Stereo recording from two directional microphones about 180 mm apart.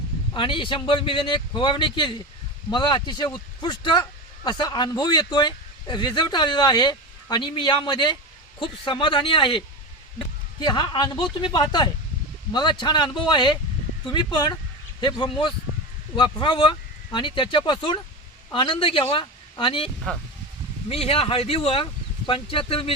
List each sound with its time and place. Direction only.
0.3 s speech: 30° left (ahead or behind)
20.9 s speech: 30° left (ahead or behind)